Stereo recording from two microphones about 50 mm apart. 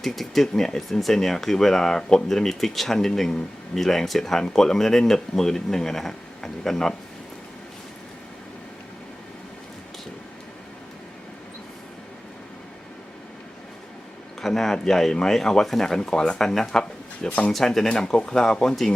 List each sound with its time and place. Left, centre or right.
0.0 s speech: centre
14.4 s speech: centre
17.2 s speech: left
17.5 s speech: centre